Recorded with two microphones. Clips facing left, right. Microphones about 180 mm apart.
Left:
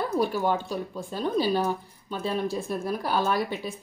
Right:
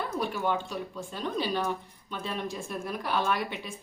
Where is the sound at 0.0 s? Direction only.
35° left (ahead or behind).